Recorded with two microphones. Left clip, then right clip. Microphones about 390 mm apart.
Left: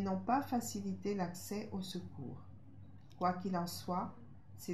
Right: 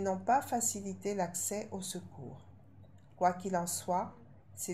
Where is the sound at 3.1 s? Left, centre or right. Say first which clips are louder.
Right 6 dB; right.